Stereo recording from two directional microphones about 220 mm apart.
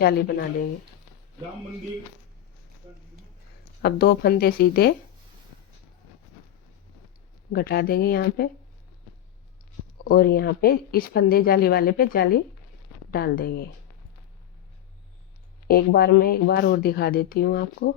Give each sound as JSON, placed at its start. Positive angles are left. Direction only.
{"t": 0.0, "sound": "speech", "side_deg": 45}
{"t": 3.8, "sound": "speech", "side_deg": 45}
{"t": 7.5, "sound": "speech", "side_deg": 45}
{"t": 10.0, "sound": "speech", "side_deg": 45}
{"t": 15.6, "sound": "speech", "side_deg": 45}